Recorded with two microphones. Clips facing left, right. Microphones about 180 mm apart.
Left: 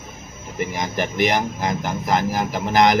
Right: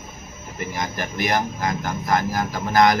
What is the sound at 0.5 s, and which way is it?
Speech, 20° left (ahead or behind).